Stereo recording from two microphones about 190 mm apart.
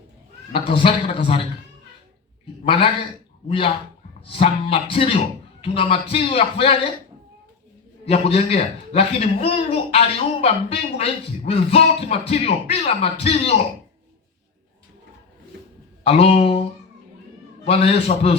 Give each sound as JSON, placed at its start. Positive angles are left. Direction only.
{"t": 0.5, "sound": "speech", "side_deg": 30}
{"t": 2.6, "sound": "speech", "side_deg": 30}
{"t": 4.3, "sound": "speech", "side_deg": 30}
{"t": 8.0, "sound": "speech", "side_deg": 30}
{"t": 16.0, "sound": "speech", "side_deg": 30}
{"t": 17.7, "sound": "speech", "side_deg": 30}